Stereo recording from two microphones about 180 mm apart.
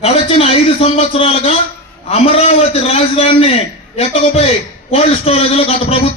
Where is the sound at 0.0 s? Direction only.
35° left (ahead or behind).